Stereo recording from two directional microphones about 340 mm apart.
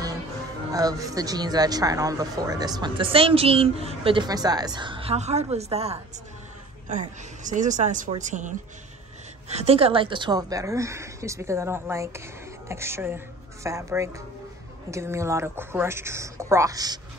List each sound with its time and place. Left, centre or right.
0.7 s a woman's voice: centre